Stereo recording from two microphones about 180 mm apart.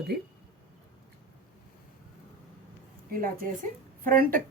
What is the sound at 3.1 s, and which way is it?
A woman's voice, 50° right (ahead or behind).